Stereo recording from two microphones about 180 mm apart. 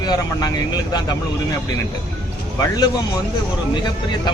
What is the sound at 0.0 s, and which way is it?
Speech, 20° left (ahead or behind).